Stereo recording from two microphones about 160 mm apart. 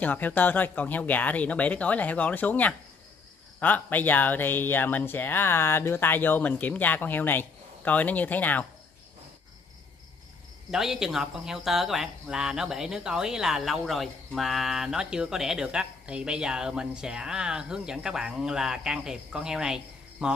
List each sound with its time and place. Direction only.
0.0 s speech: 10° left (ahead or behind)
10.7 s speech: 5° right (ahead or behind)